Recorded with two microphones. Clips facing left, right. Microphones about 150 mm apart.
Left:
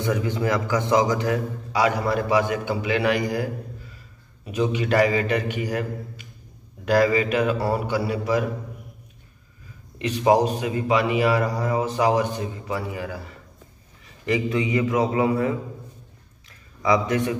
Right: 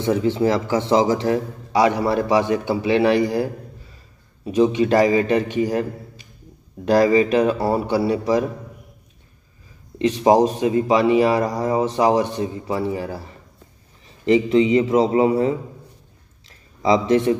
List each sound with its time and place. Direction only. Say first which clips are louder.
0.0 s a man's voice: right 6 dB; 25° right (ahead or behind)
4.5 s a man's voice: right 6 dB; 30° right (ahead or behind)
9.9 s a man's voice: right 4 dB; 35° right (ahead or behind)
16.4 s a sound: right 3 dB; 30° right (ahead or behind)